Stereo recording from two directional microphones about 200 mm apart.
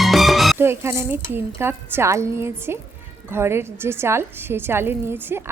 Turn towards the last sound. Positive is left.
turn(degrees=-10)  # may be behind; listen again after turning